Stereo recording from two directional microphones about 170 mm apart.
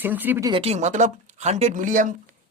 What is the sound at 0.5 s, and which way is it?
Speech, 35° right (ahead or behind).